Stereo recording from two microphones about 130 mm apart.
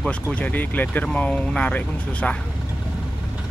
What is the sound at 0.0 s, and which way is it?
Speech, 10° left (ahead or behind).